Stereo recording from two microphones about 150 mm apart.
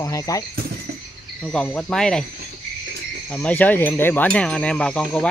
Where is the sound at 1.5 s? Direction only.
5° left (ahead or behind).